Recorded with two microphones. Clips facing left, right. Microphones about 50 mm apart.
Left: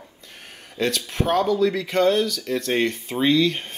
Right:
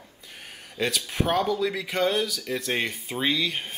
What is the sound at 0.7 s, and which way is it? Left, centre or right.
Speech, centre.